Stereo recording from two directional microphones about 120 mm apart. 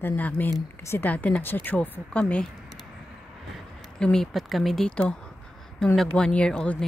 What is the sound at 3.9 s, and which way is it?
Speech, 5° left (ahead or behind).